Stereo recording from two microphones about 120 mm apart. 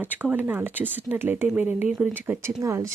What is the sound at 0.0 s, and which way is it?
Speech, 15° right (ahead or behind).